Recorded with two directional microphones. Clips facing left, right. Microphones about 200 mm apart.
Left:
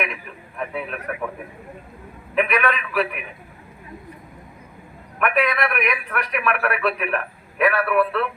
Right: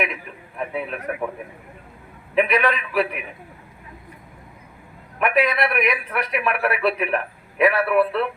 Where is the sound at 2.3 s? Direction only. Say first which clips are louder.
Right 2 dB; 25° right (ahead or behind).